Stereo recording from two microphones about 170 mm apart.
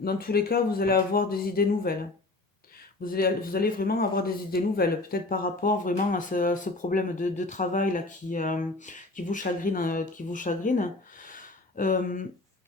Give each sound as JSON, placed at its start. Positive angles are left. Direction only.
{"t": 0.0, "sound": "speech", "side_deg": 65}
{"t": 3.0, "sound": "speech", "side_deg": 60}